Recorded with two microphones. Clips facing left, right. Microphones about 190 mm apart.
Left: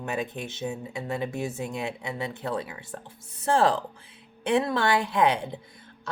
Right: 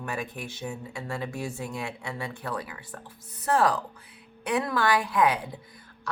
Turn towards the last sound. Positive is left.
turn(degrees=25)  # may be behind; listen again after turning